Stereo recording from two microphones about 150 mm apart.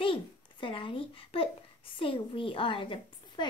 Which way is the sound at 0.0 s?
35° left (ahead or behind).